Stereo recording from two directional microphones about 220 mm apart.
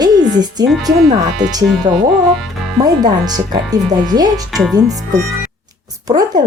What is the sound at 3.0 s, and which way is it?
Speech, 20° right (ahead or behind).